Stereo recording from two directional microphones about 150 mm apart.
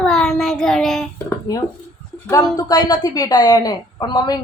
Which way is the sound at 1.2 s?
25° left (ahead or behind).